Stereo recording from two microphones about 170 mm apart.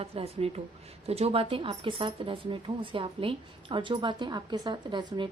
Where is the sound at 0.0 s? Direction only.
35° right (ahead or behind).